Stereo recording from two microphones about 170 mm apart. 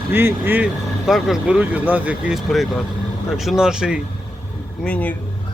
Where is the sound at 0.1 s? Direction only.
15° right (ahead or behind).